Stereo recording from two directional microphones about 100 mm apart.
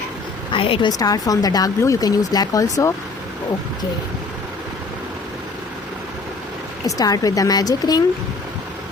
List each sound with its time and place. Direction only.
0.5 s speech: 60° left (ahead or behind)
0.9 s speech: 40° left (ahead or behind)
6.8 s speech: 35° left (ahead or behind)